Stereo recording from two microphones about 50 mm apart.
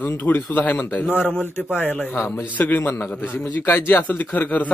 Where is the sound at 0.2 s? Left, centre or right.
Left.